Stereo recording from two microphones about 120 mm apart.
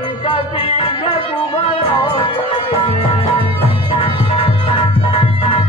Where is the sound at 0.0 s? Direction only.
45° left (ahead or behind).